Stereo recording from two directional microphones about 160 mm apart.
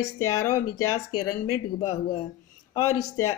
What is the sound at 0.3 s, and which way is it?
Speech, 20° left (ahead or behind).